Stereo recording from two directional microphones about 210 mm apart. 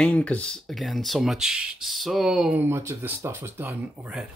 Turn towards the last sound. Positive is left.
turn(degrees=-10)  # may be behind; listen again after turning